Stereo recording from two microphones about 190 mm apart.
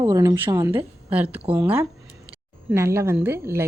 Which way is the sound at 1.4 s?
30° right (ahead or behind).